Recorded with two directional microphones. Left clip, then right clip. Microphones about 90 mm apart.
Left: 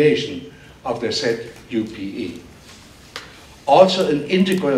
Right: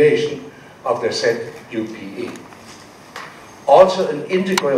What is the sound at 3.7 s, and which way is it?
Speech, 10° left (ahead or behind).